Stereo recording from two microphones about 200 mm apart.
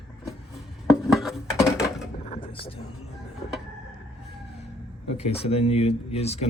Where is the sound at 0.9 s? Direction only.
Centre (ahead or behind).